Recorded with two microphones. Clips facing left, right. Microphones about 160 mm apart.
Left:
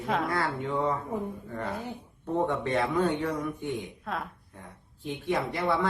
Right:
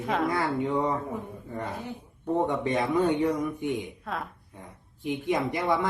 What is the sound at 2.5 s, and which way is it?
Speech, 15° right (ahead or behind).